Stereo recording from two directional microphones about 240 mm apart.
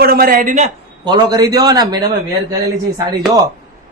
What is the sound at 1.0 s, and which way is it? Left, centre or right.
A man's voice, centre.